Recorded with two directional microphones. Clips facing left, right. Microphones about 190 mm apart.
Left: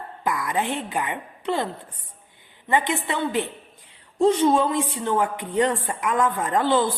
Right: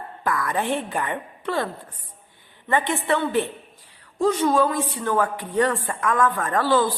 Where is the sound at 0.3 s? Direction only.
15° left (ahead or behind).